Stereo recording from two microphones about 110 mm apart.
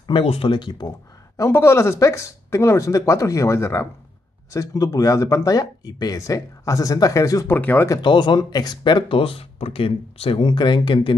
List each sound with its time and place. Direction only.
0.2 s speech: 60° left (ahead or behind); by 0.8 s 45° left (ahead or behind)
1.5 s speech: 25° left (ahead or behind)
7.5 s speech: 15° left (ahead or behind)
8.0 s speech: 45° left (ahead or behind)